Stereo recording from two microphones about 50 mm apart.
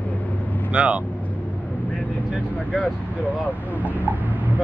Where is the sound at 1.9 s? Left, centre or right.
Left.